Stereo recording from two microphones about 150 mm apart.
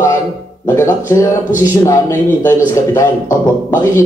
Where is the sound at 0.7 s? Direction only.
20° left (ahead or behind).